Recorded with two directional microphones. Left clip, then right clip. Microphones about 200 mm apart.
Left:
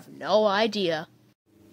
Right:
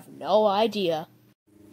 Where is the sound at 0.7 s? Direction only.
Centre (ahead or behind).